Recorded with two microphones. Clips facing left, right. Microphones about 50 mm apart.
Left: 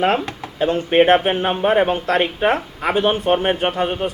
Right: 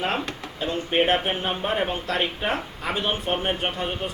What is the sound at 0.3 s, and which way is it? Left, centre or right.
Speech, left.